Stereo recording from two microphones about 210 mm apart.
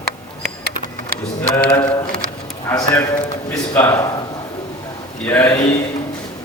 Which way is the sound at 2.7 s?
15° left (ahead or behind).